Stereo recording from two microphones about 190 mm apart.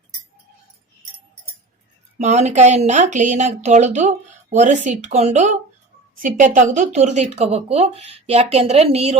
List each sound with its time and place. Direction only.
2.1 s speech: 35° right (ahead or behind)